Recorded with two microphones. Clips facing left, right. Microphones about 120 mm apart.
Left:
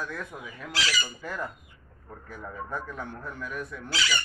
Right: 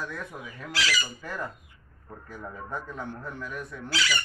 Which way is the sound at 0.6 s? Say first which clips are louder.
Right 1 dB; 20° left (ahead or behind).